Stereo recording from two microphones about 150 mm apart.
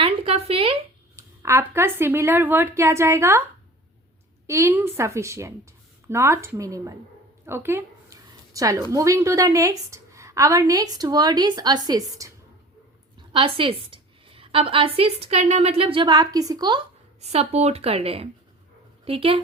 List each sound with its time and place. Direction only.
0.0 s a sound: 40° right (ahead or behind)
1.1 s speech: 20° right (ahead or behind)
4.4 s a woman's voice: 20° right (ahead or behind)
7.4 s a sound: 15° right (ahead or behind)
8.3 s a woman's voice: 25° right (ahead or behind)
13.1 s a woman's voice: 35° right (ahead or behind)
17.2 s a woman's voice: 45° right (ahead or behind)